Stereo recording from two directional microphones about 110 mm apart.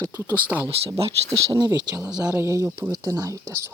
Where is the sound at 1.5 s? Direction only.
35° right (ahead or behind).